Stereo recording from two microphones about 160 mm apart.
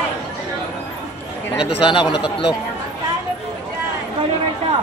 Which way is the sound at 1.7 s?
30° left (ahead or behind).